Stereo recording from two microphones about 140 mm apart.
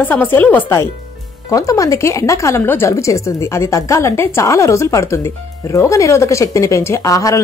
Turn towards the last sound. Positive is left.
turn(degrees=25)  # may be behind; listen again after turning